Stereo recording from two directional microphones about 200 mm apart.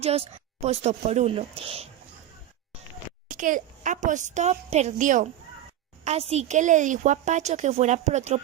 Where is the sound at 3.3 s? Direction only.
40° right (ahead or behind).